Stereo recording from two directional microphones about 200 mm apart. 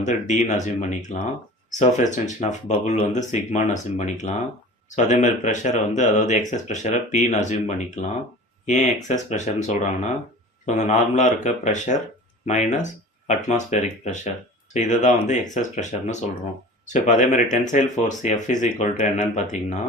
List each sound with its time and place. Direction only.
0.0 s speech: 35° left (ahead or behind)